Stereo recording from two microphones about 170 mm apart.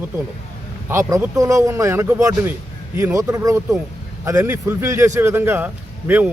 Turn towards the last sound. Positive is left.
turn(degrees=-10)  # may be behind; listen again after turning